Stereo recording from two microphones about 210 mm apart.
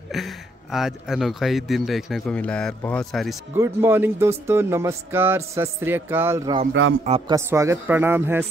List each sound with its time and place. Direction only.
0.1 s speech: centre (ahead or behind)
3.5 s speech: 10° right (ahead or behind)
6.7 s speech: 65° right (ahead or behind)
7.1 s speech: 25° right (ahead or behind)
7.3 s speech: 15° right (ahead or behind)